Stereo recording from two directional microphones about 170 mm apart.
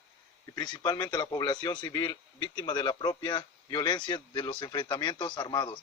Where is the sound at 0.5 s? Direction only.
25° left (ahead or behind).